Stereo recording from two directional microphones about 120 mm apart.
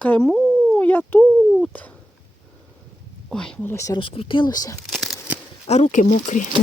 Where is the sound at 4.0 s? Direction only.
45° left (ahead or behind).